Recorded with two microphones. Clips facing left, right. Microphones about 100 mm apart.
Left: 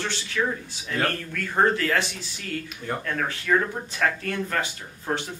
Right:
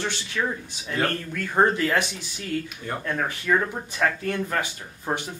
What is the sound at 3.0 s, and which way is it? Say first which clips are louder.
Speech: right 4 dB; 15° right (ahead or behind).